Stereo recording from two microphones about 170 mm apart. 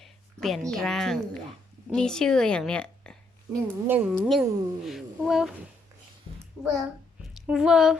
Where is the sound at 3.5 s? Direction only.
10° right (ahead or behind).